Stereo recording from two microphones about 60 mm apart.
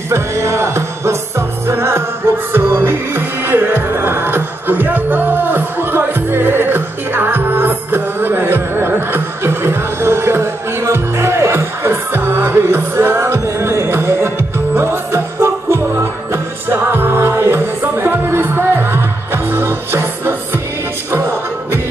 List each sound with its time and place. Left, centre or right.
0.1 s music: right